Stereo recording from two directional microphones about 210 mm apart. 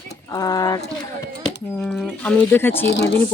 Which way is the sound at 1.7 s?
Centre (ahead or behind).